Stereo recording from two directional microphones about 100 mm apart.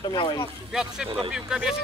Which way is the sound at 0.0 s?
45° left (ahead or behind).